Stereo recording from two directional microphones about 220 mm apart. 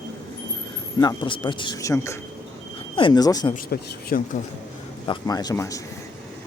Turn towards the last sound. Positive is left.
turn(degrees=15)  # may be behind; listen again after turning